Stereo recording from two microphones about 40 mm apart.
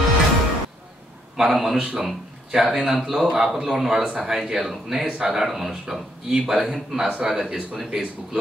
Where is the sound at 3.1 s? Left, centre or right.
Centre.